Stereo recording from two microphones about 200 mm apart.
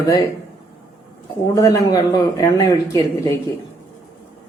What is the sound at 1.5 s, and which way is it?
Speech, 15° left (ahead or behind).